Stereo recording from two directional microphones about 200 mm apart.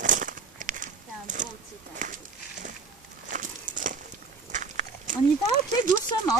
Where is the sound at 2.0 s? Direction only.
40° right (ahead or behind).